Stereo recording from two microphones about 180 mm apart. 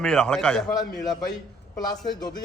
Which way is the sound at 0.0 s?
5° left (ahead or behind).